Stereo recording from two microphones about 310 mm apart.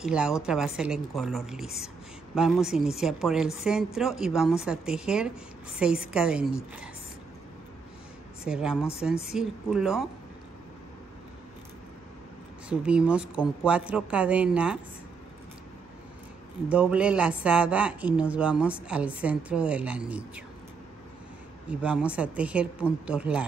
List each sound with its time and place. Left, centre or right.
0.0 s speech: centre
8.5 s speech: centre
12.6 s speech: centre
16.6 s speech: centre
21.6 s speech: centre